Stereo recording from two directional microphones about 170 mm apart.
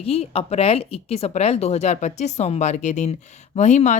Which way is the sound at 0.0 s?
35° left (ahead or behind).